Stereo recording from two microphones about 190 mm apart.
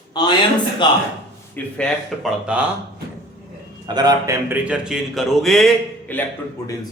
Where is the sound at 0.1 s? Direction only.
20° left (ahead or behind).